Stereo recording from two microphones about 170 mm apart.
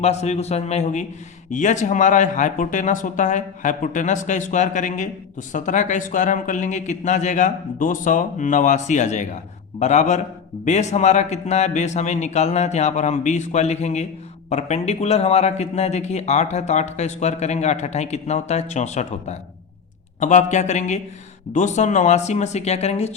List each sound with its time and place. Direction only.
0.0 s speech: 40° left (ahead or behind)